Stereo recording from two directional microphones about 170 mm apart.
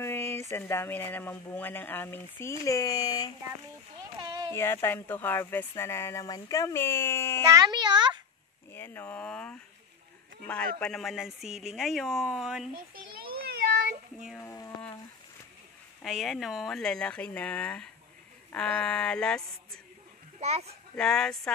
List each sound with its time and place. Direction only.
0.0 s speech: 15° left (ahead or behind)
4.2 s a sound: 25° right (ahead or behind)
4.6 s speech: 15° left (ahead or behind)
7.4 s a child's voice: 20° right (ahead or behind)
8.7 s speech: 10° left (ahead or behind)
13.3 s a sound: 65° right (ahead or behind)
14.4 s a sound: 15° left (ahead or behind)
16.0 s speech: centre (ahead or behind)
20.3 s a child's voice: 40° right (ahead or behind)
20.9 s speech: 5° left (ahead or behind)